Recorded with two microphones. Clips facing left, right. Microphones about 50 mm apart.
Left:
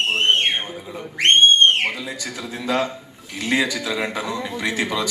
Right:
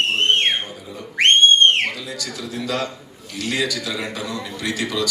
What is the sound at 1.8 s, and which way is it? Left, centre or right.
A man's voice, centre.